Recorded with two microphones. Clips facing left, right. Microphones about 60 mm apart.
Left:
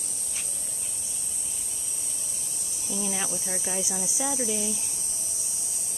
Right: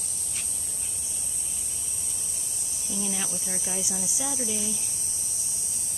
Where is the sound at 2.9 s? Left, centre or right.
Centre.